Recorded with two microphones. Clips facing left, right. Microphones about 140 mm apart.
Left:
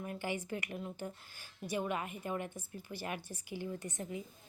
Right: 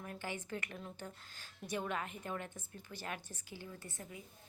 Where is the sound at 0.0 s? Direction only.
10° left (ahead or behind).